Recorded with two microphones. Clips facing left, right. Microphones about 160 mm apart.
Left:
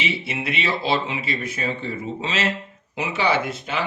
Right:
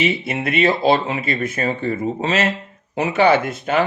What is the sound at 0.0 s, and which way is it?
Speech, 50° right (ahead or behind).